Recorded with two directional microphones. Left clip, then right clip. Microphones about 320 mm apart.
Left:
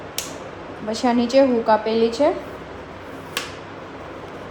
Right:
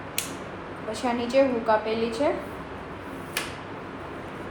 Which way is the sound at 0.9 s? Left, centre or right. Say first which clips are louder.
Left 7 dB; left.